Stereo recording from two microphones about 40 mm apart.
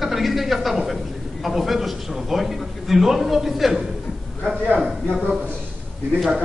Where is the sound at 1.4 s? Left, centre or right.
Centre.